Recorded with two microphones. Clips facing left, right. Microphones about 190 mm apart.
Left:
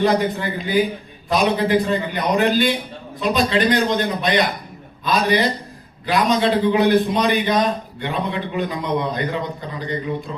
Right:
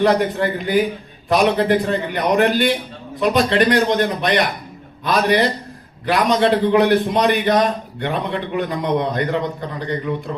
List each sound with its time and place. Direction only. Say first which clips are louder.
0.0 s a man's voice: right 2 dB; 60° right (ahead or behind)